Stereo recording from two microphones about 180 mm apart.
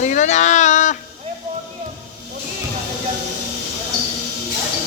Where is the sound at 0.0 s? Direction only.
40° left (ahead or behind).